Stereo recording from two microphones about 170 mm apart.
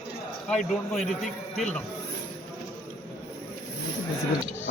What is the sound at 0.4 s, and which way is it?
Speech, centre (ahead or behind).